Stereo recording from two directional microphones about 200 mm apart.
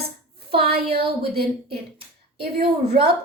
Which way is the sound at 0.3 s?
50° right (ahead or behind).